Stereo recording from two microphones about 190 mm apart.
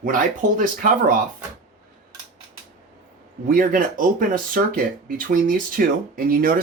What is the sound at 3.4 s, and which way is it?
Speech, 45° right (ahead or behind).